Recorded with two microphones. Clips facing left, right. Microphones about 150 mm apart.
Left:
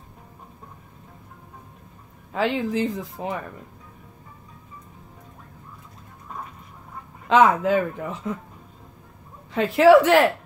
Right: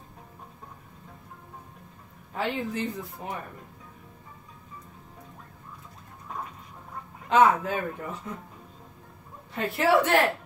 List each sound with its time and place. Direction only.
2.3 s speech: 90° left
7.2 s speech: 90° left
9.5 s speech: 90° left